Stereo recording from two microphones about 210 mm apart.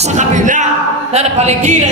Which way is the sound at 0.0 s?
35° right (ahead or behind).